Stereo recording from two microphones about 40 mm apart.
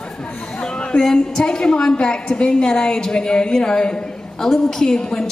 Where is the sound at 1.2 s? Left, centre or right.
Left.